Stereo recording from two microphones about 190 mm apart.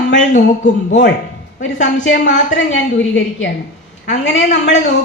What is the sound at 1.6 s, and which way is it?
A man's voice, 75° left (ahead or behind).